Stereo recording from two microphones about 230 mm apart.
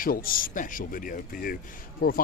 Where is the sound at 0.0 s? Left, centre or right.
Left.